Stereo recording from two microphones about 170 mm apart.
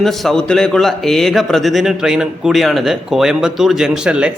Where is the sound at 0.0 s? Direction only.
Centre (ahead or behind).